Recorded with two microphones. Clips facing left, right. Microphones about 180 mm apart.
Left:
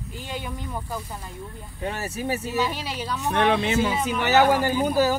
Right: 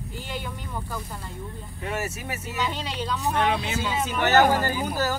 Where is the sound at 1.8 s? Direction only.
35° left (ahead or behind).